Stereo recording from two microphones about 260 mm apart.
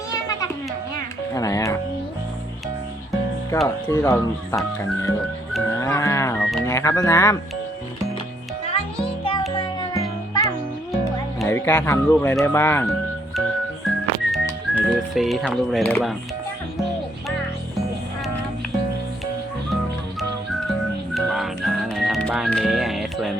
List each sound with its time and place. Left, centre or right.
0.1 s music: centre
3.9 s speech: centre
5.5 s livestock: centre
6.4 s music: centre
6.7 s speech: centre
8.6 s music: left
11.3 s speech: centre
13.8 s music: centre
20.7 s music: centre